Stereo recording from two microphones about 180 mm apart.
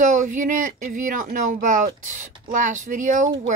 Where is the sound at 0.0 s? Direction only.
45° right (ahead or behind).